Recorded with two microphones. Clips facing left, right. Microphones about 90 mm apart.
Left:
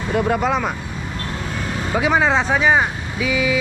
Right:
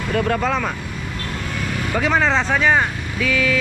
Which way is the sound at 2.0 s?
10° left (ahead or behind).